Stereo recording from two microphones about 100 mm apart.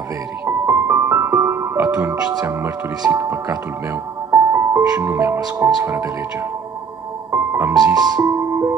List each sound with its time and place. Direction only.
0.5 s music: 25° right (ahead or behind)
3.1 s speech: 25° right (ahead or behind)
4.3 s music: 30° right (ahead or behind)
5.0 s speech: 25° right (ahead or behind)
7.2 s music: 25° right (ahead or behind)
7.7 s music: 40° right (ahead or behind)